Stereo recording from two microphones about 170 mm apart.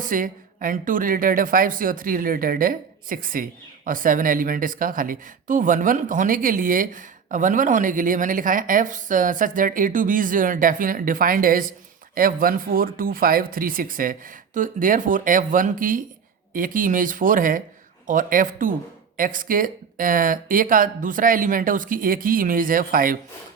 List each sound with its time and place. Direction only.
0.0 s speech: 50° right (ahead or behind)